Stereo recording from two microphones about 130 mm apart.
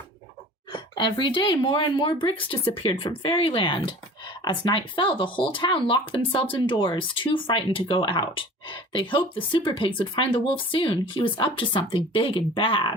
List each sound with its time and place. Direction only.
0.7 s speech: 40° left (ahead or behind)